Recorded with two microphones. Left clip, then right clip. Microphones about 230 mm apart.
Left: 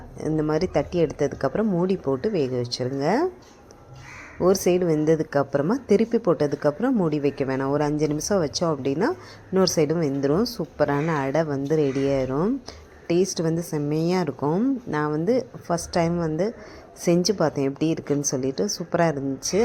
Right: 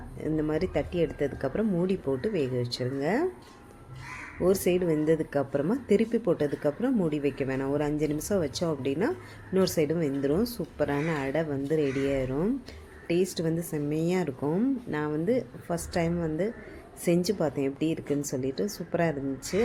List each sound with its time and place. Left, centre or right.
0.2 s a woman's voice: centre
4.4 s a woman's voice: centre